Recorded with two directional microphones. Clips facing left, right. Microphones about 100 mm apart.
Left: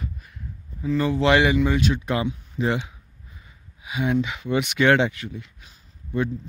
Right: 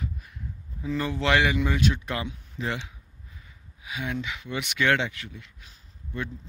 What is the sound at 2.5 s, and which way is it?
Speech, 25° left (ahead or behind).